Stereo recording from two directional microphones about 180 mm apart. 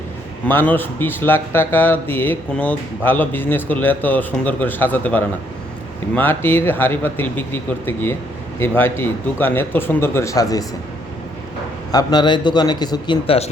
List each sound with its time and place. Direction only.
0.4 s speech: 10° left (ahead or behind)
11.9 s a man's voice: 20° left (ahead or behind)